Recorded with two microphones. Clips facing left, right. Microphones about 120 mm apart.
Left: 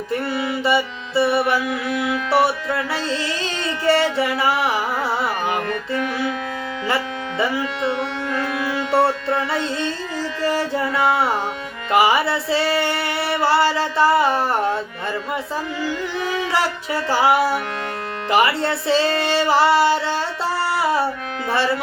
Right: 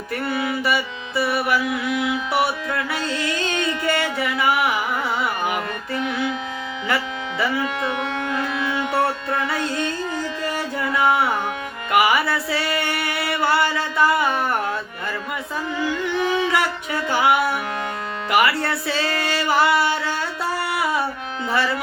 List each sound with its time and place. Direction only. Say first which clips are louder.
0.1 s music: left 1 dB; 25° left (ahead or behind)
2.0 s music: left 1 dB; 20° right (ahead or behind)
2.4 s music: left 3 dB; 30° left (ahead or behind)
6.8 s music: left 1 dB; 25° left (ahead or behind)
7.8 s music: left 2 dB; 15° right (ahead or behind)
8.9 s music: left 7 dB; 25° left (ahead or behind)
16.5 s music: left 1 dB; 30° left (ahead or behind)